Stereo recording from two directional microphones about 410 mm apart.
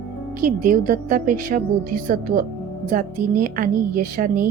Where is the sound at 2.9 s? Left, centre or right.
Centre.